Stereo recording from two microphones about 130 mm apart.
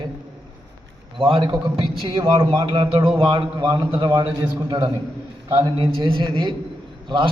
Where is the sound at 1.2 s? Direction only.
45° right (ahead or behind).